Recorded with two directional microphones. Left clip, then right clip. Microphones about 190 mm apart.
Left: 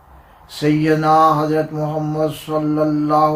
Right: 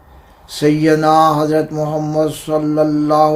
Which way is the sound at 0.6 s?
50° right (ahead or behind).